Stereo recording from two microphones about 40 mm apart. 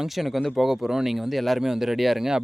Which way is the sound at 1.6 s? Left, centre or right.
Centre.